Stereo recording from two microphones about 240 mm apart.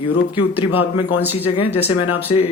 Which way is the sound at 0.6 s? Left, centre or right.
Left.